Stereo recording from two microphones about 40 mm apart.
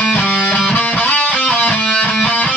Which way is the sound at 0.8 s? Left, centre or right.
Left.